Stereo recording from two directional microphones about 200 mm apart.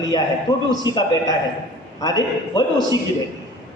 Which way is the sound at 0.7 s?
20° left (ahead or behind).